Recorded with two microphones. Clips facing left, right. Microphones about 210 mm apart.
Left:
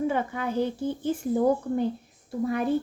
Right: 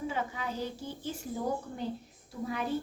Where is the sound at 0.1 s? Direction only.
55° left (ahead or behind).